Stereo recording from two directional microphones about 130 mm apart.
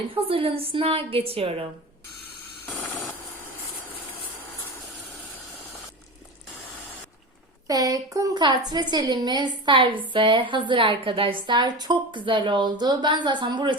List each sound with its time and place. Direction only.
0.1 s a woman's voice: 45° right (ahead or behind)
7.7 s a woman's voice: 30° right (ahead or behind)